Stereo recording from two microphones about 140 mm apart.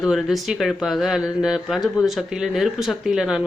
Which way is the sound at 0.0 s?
Centre (ahead or behind).